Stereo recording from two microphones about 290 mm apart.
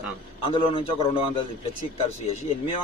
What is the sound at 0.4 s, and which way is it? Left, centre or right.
Speech, centre.